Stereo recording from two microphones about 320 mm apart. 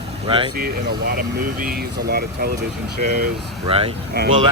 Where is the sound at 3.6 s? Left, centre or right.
Centre.